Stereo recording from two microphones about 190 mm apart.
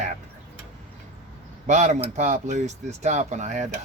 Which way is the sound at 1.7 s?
40° right (ahead or behind).